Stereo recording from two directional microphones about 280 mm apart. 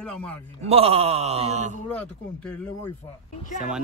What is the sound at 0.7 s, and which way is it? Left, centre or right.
Wail, right.